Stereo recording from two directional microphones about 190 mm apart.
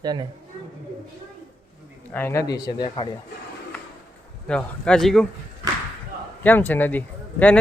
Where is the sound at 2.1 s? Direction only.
10° left (ahead or behind).